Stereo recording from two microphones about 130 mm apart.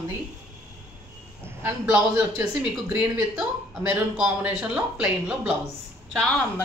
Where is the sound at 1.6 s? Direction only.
10° right (ahead or behind).